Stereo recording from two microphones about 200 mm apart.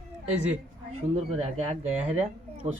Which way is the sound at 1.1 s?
30° right (ahead or behind).